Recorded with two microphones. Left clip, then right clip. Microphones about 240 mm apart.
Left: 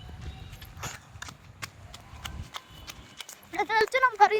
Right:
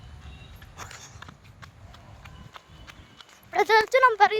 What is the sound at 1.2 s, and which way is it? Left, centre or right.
Horse, left.